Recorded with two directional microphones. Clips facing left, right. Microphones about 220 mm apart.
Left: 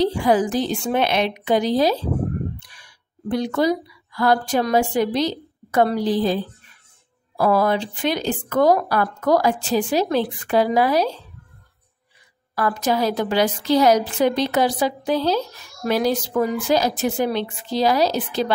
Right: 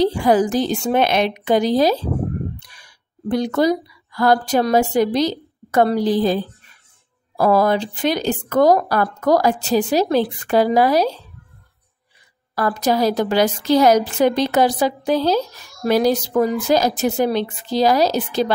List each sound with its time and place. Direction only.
0.0 s a woman's voice: 40° right (ahead or behind)
3.3 s a woman's voice: 40° right (ahead or behind)
12.5 s a woman's voice: 40° right (ahead or behind)